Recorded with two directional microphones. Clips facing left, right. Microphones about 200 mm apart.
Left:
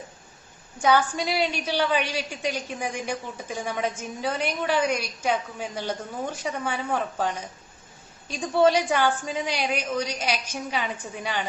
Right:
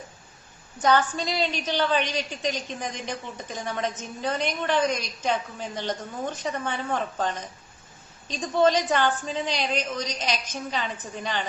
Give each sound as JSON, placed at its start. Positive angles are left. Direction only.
{"t": 0.8, "sound": "a woman's voice", "side_deg": 10}